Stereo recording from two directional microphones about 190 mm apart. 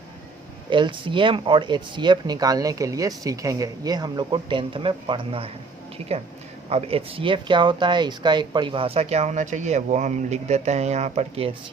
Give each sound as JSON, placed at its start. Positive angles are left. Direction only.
{"t": 0.7, "sound": "speech", "side_deg": -25}
{"t": 6.7, "sound": "speech", "side_deg": -30}